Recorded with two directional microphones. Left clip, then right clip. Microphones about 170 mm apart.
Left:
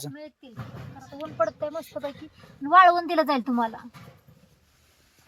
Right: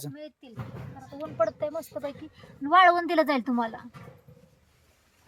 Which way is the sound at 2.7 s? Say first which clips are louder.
Left 3 dB; 25° left (ahead or behind).